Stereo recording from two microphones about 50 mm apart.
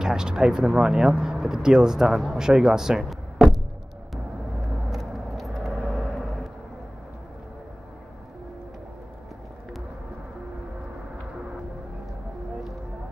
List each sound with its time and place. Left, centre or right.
0.0 s speech: centre
4.8 s vehicle: centre
5.8 s vehicle: centre